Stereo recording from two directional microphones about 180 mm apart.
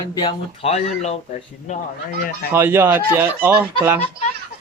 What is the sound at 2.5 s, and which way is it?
Speech, 10° right (ahead or behind).